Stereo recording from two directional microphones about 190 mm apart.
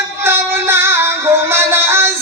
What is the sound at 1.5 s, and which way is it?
Music, 10° right (ahead or behind).